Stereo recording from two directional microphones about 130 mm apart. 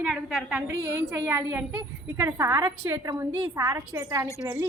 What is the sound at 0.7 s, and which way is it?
A woman's voice, 25° right (ahead or behind).